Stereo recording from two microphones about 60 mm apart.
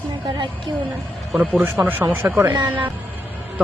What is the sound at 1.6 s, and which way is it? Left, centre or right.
Speech, right.